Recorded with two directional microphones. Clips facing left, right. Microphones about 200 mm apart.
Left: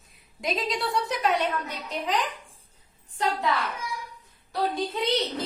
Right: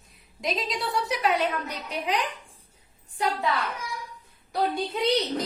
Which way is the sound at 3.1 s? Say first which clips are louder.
Even; 10° right (ahead or behind).